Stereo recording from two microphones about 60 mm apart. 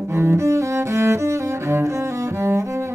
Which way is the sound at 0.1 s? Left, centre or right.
Right.